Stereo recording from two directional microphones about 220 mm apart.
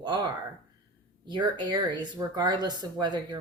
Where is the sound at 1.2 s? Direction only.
20° right (ahead or behind).